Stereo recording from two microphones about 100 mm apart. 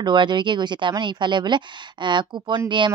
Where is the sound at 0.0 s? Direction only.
50° right (ahead or behind).